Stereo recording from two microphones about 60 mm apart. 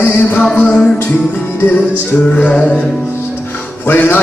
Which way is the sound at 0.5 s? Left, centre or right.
Centre.